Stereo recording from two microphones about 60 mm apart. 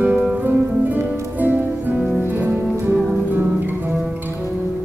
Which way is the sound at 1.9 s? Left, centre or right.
Centre.